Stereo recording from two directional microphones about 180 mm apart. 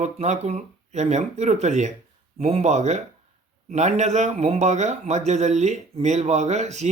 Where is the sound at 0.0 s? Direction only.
40° right (ahead or behind).